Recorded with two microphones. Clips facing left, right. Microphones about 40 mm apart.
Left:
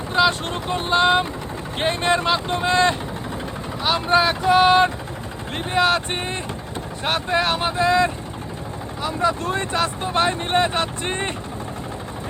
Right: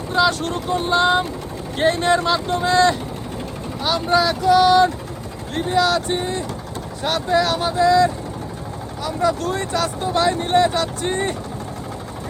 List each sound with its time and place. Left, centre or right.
0.1 s speech: left